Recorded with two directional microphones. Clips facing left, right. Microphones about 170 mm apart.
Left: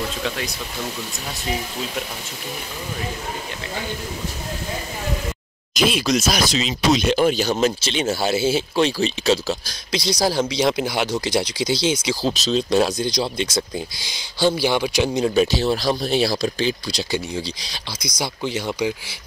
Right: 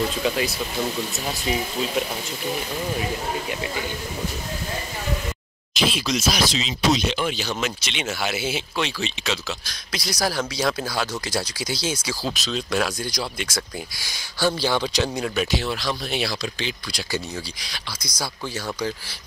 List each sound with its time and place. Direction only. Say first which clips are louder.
0.2 s speech: right 3 dB; 5° right (ahead or behind)
5.9 s speech: left 4 dB; 50° left (ahead or behind)
9.9 s speech: left 5 dB; 25° left (ahead or behind)
15.1 s speech: left 6 dB; 30° left (ahead or behind)
17.1 s speech: left 2 dB; 25° left (ahead or behind)